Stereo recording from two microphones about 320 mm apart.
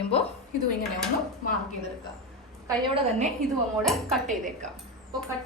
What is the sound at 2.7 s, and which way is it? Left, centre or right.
Speech, centre.